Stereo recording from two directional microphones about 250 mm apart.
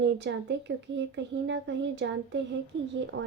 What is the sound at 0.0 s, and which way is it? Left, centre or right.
Speech, right.